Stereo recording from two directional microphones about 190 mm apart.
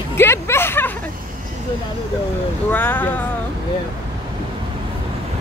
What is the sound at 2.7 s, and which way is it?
Speech, 10° left (ahead or behind).